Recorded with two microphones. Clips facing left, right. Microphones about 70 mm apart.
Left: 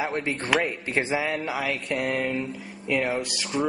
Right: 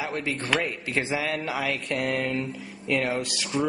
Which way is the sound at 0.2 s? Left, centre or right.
Left.